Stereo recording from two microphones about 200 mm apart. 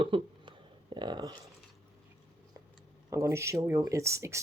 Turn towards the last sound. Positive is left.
turn(degrees=-15)  # may be behind; listen again after turning